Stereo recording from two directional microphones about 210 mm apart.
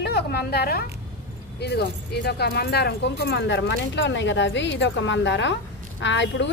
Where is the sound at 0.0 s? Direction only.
50° left (ahead or behind).